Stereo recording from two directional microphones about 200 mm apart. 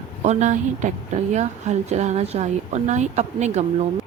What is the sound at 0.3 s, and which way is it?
A woman's voice, 35° right (ahead or behind).